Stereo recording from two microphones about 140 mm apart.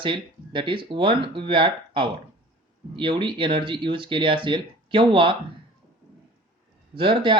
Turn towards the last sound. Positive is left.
turn(degrees=-35)  # may be behind; listen again after turning